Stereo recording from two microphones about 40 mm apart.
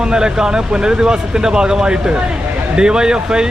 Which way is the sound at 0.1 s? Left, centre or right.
Centre.